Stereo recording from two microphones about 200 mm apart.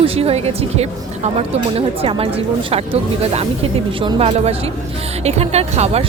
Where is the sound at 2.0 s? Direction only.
30° right (ahead or behind).